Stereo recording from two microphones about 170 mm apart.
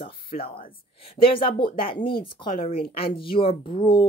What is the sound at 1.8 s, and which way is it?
Speech, 30° left (ahead or behind).